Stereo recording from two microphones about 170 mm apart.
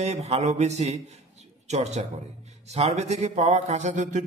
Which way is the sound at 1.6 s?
40° right (ahead or behind).